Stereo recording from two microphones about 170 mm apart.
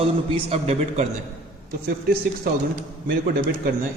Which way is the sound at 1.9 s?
65° right (ahead or behind).